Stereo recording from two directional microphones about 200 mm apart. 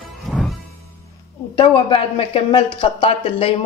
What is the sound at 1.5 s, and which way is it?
Speech, 25° left (ahead or behind).